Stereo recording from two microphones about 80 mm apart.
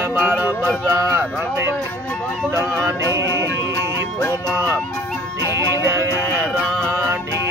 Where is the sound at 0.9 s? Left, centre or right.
Right.